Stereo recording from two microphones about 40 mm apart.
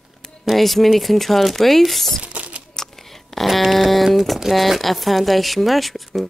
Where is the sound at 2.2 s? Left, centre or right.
Right.